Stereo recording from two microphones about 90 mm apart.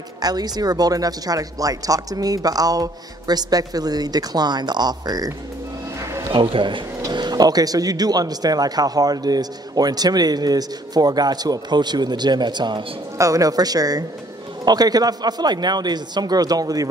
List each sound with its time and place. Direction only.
0.2 s speech: 45° right (ahead or behind)
6.3 s a man's voice: 60° right (ahead or behind)
7.0 s speech: 50° right (ahead or behind)
13.2 s speech: 40° right (ahead or behind)